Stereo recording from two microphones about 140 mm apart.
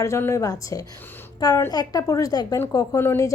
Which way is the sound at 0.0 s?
20° left (ahead or behind).